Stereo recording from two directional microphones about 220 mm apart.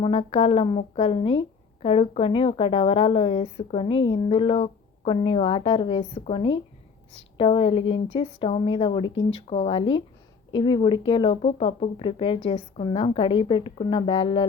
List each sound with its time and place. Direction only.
0.0 s a woman's voice: 25° left (ahead or behind)